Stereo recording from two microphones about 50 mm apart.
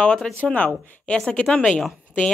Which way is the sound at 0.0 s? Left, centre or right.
Left.